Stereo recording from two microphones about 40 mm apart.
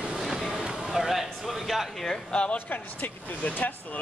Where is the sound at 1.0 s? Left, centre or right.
Centre.